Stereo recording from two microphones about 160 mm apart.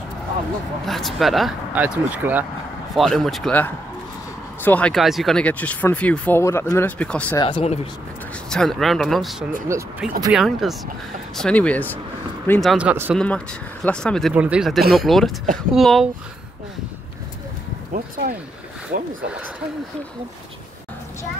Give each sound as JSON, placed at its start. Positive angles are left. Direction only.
{"t": 0.8, "sound": "speech", "side_deg": 0}
{"t": 2.0, "sound": "speech", "side_deg": -10}
{"t": 3.0, "sound": "speech", "side_deg": 0}
{"t": 7.3, "sound": "speech", "side_deg": 35}
{"t": 8.5, "sound": "speech", "side_deg": 5}
{"t": 9.7, "sound": "speech", "side_deg": -15}
{"t": 10.3, "sound": "speech", "side_deg": 0}
{"t": 12.5, "sound": "speech", "side_deg": -5}
{"t": 13.1, "sound": "speech", "side_deg": 5}
{"t": 14.3, "sound": "speech", "side_deg": -5}
{"t": 17.9, "sound": "speech", "side_deg": -60}